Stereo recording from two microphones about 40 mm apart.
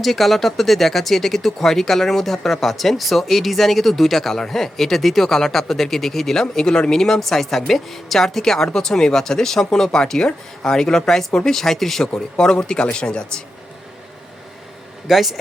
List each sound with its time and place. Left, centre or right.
0.0 s speech: centre
6.7 s a man's voice: left
7.0 s a woman's voice: centre
12.1 s a man's voice: centre
15.1 s speech: centre